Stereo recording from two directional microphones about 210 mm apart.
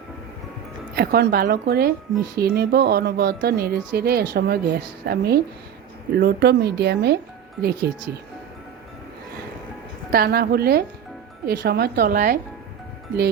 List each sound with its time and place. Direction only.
0.9 s speech: 50° right (ahead or behind)
10.1 s speech: 45° right (ahead or behind)